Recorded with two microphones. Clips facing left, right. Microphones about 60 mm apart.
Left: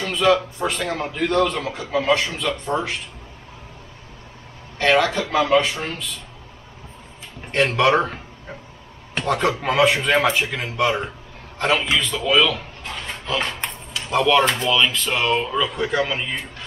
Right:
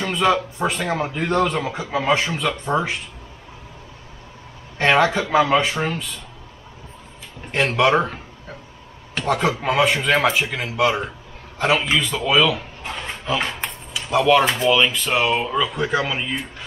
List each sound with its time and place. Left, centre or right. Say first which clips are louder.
0.1 s a man's voice: left 2 dB; right
4.7 s a man's voice: right 1 dB; centre
7.5 s speech: even; centre
9.2 s a man's voice: even; centre
13.6 s speech: even; centre